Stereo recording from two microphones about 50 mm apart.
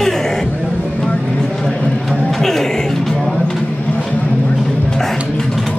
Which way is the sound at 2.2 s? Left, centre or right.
Centre.